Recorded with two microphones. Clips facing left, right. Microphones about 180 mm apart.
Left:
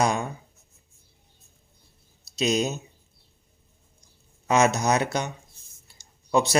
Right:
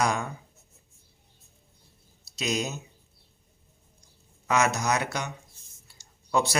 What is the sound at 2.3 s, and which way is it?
Speech, 25° left (ahead or behind).